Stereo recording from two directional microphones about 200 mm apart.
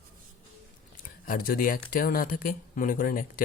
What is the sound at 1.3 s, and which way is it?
Speech, 45° left (ahead or behind).